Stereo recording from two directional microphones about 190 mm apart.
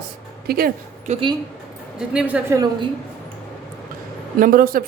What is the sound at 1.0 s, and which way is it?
Speech, 35° right (ahead or behind).